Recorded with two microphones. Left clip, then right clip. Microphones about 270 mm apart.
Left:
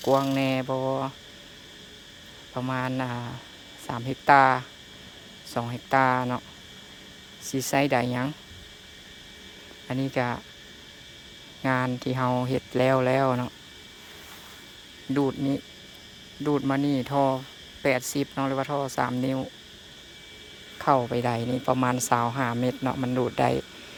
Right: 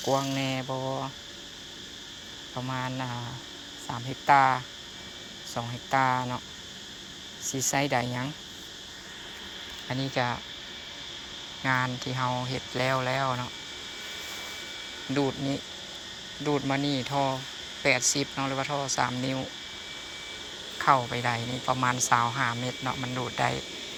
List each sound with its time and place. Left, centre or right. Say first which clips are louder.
0.0 s speech: left 4 dB; left
0.7 s speech: left 5 dB; left
2.6 s speech: left 4 dB; left
7.4 s speech: left 3 dB; centre
9.9 s speech: left 2 dB; left
11.6 s speech: left 1 dB; left
15.1 s speech: left 3 dB; left
20.7 s speech: left 1 dB; left